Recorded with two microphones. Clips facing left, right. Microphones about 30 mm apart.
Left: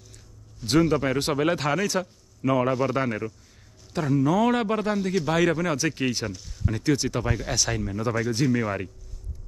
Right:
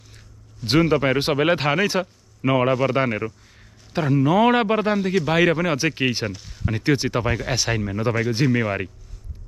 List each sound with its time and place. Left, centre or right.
0.7 s a man's voice: right